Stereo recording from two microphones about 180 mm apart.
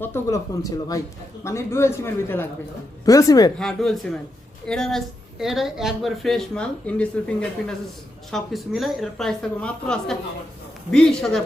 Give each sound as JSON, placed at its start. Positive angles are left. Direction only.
{"t": 0.0, "sound": "speech", "side_deg": 15}
{"t": 3.6, "sound": "a woman's voice", "side_deg": 0}